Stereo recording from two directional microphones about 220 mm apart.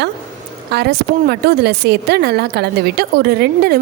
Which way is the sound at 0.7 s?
45° right (ahead or behind).